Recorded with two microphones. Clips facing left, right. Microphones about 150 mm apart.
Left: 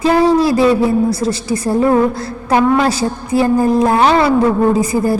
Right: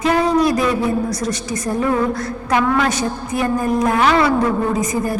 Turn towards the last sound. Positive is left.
turn(degrees=30)  # may be behind; listen again after turning